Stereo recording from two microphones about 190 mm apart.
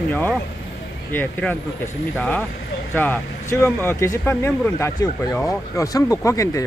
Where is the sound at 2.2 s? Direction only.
5° left (ahead or behind).